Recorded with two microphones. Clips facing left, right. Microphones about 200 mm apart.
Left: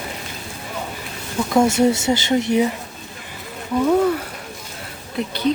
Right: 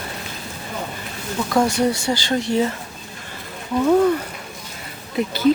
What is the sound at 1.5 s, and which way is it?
Speech, 25° left (ahead or behind).